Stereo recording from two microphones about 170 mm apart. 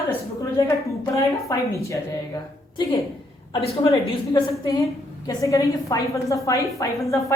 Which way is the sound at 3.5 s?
25° left (ahead or behind).